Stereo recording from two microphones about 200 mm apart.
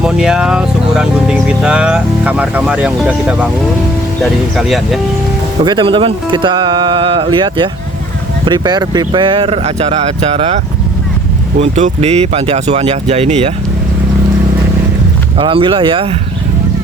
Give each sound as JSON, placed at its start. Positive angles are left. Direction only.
{"t": 0.0, "sound": "speech", "side_deg": -5}
{"t": 5.6, "sound": "speech", "side_deg": -25}
{"t": 11.6, "sound": "speech", "side_deg": -35}
{"t": 15.4, "sound": "speech", "side_deg": -25}